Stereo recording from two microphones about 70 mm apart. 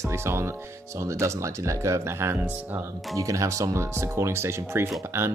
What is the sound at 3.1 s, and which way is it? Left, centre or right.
Speech, right.